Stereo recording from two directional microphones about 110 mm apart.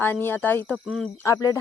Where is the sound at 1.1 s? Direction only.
30° left (ahead or behind).